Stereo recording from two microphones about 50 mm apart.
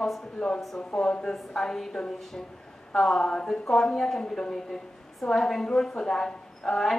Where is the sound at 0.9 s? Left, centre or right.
Centre.